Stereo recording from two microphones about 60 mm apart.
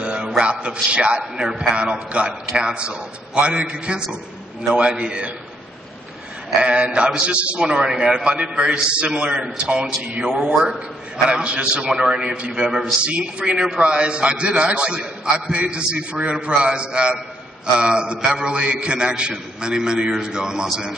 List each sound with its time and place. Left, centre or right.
0.0 s a sound: centre
0.4 s a man's voice: centre
6.6 s a man's voice: centre